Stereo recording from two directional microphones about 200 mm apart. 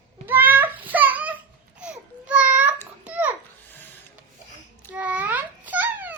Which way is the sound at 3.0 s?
10° right (ahead or behind).